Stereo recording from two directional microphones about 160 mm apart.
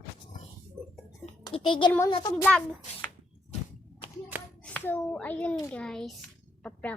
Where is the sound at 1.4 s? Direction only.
30° left (ahead or behind).